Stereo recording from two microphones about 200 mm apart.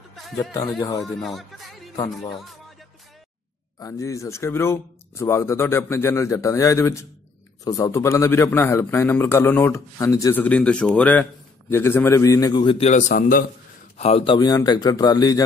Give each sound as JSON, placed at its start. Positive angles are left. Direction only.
{"t": 0.4, "sound": "a man's voice", "side_deg": 15}
{"t": 1.0, "sound": "speech", "side_deg": 0}
{"t": 3.8, "sound": "a man's voice", "side_deg": 15}
{"t": 13.1, "sound": "a man's voice", "side_deg": 45}
{"t": 13.9, "sound": "a man's voice", "side_deg": 30}